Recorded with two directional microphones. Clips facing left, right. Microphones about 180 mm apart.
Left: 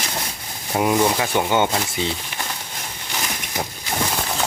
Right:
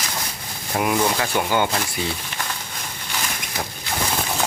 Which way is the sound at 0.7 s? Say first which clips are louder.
Left 2 dB; 20° left (ahead or behind).